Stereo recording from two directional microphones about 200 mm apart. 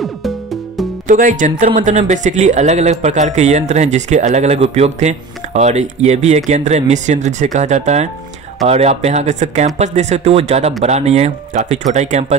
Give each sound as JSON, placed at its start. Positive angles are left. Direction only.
{"t": 0.0, "sound": "music", "side_deg": 0}
{"t": 1.0, "sound": "speech", "side_deg": -40}